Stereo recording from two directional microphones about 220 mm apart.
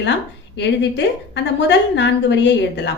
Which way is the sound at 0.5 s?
50° left (ahead or behind).